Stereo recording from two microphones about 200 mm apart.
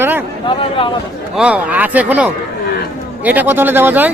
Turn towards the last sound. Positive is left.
turn(degrees=-10)  # may be behind; listen again after turning